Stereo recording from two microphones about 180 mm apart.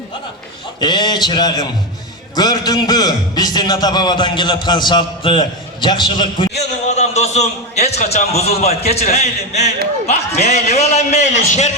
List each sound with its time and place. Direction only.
0.8 s a man's voice: 25° left (ahead or behind)
6.6 s a man's voice: 40° left (ahead or behind)